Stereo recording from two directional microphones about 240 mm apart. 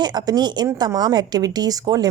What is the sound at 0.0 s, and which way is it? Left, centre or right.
Speech, centre.